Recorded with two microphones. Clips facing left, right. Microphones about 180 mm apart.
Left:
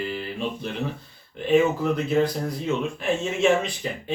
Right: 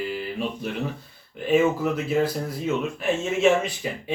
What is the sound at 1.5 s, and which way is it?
Speech, 5° right (ahead or behind).